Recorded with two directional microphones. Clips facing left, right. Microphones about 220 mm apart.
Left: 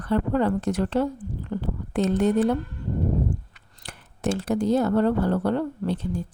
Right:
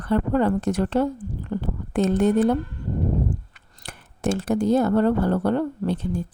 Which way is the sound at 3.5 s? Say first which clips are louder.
Right 2 dB; 50° right (ahead or behind).